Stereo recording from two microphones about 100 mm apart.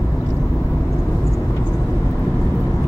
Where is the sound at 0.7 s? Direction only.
Centre (ahead or behind).